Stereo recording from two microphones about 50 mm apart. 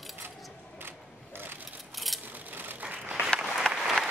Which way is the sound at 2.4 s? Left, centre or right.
Right.